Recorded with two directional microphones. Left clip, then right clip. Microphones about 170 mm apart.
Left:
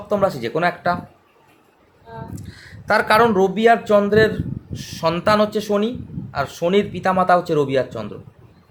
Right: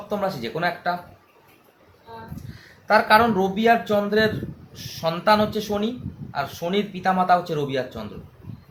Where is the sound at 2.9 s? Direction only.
90° left.